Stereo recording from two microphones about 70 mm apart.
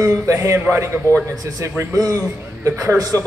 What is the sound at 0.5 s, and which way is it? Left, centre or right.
Speech, right.